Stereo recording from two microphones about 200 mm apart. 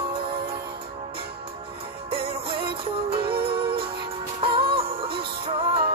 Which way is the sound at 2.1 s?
25° right (ahead or behind).